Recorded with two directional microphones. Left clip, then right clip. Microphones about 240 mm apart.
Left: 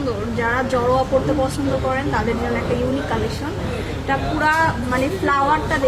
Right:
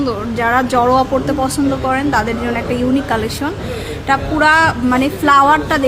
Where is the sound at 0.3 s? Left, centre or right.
Right.